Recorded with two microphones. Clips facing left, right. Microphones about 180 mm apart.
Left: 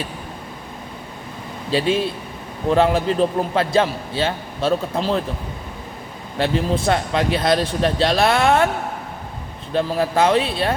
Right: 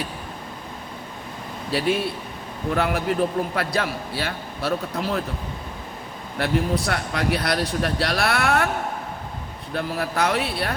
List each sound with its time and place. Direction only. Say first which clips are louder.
1.7 s a man's voice: left 3 dB; 20° left (ahead or behind)
6.3 s a man's voice: left 3 dB; 25° left (ahead or behind)
9.7 s a man's voice: left 6 dB; 25° left (ahead or behind)